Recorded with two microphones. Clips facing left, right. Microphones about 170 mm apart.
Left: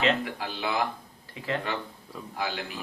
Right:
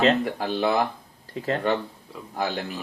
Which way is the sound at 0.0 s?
40° right (ahead or behind).